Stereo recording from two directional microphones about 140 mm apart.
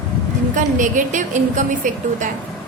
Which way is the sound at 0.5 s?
65° right (ahead or behind).